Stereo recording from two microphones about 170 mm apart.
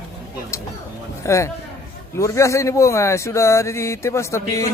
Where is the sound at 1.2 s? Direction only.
15° left (ahead or behind).